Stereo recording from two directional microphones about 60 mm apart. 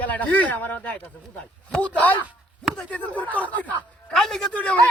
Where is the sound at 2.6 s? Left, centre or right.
Centre.